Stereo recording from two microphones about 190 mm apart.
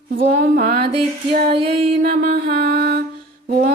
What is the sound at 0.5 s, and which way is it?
Mantra, 50° right (ahead or behind).